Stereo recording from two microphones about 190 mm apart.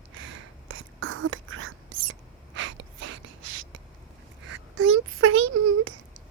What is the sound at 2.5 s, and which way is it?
Gasp, 75° right (ahead or behind).